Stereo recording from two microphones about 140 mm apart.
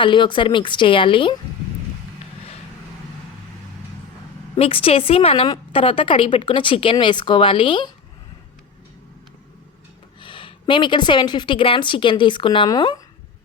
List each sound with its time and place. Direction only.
0.0 s a woman's voice: 35° left (ahead or behind)
4.5 s a woman's voice: 45° left (ahead or behind)
10.2 s a woman's voice: 35° left (ahead or behind)